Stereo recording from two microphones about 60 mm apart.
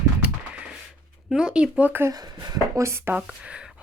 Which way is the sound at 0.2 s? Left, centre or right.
Centre.